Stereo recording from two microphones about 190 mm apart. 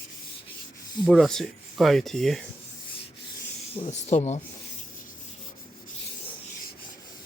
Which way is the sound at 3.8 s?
35° left (ahead or behind).